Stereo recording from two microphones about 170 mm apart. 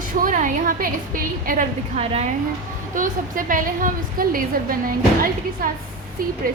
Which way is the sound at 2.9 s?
50° right (ahead or behind).